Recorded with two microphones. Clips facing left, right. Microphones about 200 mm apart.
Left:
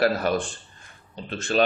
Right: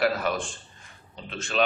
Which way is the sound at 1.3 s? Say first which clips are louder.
Left 4 dB; 35° left (ahead or behind).